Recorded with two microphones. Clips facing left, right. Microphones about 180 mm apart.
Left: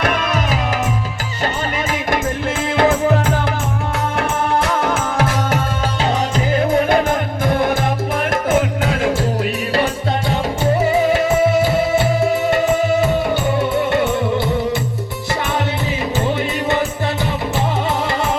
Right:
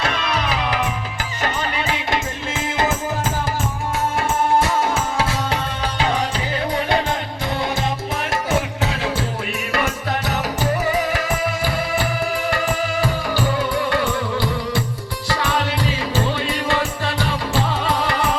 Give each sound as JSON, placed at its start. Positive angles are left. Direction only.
{"t": 0.0, "sound": "music", "side_deg": 50}
{"t": 2.7, "sound": "music", "side_deg": 60}
{"t": 9.7, "sound": "music", "side_deg": 30}
{"t": 16.2, "sound": "music", "side_deg": 20}